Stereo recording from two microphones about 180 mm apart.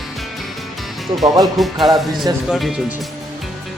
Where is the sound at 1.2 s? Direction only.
20° right (ahead or behind).